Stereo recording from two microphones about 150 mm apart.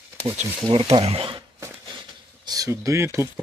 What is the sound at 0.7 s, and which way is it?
Speech, 35° right (ahead or behind).